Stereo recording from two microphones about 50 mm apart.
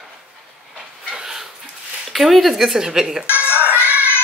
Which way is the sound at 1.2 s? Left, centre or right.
Centre.